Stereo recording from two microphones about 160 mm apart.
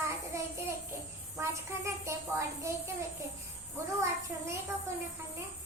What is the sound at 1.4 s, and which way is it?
Speech, 15° right (ahead or behind).